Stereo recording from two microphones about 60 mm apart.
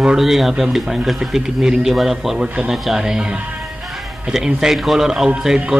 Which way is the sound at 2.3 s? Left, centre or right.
Right.